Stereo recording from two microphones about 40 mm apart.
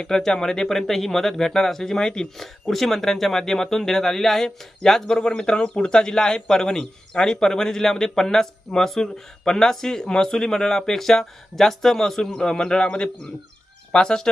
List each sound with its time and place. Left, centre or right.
0.0 s a man's voice: centre
2.4 s a man's voice: centre
5.0 s a man's voice: centre